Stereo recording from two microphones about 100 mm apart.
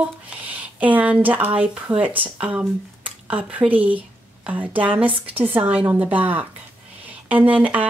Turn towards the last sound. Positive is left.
turn(degrees=-15)  # may be behind; listen again after turning